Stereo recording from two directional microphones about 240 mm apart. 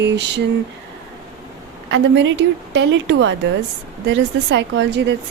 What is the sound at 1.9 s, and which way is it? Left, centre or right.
A woman's voice, right.